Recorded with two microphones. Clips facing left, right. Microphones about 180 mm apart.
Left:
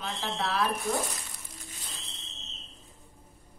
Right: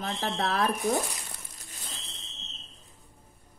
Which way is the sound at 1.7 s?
45° right (ahead or behind).